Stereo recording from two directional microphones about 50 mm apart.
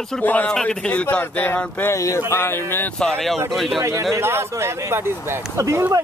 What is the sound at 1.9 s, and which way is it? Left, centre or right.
Speech, left.